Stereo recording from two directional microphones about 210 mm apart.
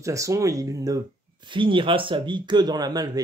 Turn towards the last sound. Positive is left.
turn(degrees=-20)  # may be behind; listen again after turning